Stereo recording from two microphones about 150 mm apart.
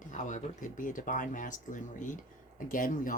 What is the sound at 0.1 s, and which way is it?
Speech, 55° left (ahead or behind).